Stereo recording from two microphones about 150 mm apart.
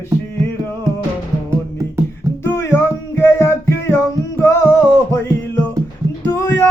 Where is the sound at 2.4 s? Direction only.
15° left (ahead or behind).